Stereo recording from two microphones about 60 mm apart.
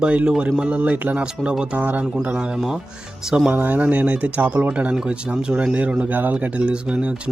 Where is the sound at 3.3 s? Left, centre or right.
Centre.